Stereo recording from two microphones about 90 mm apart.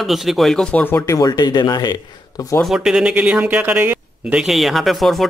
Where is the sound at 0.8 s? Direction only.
25° left (ahead or behind).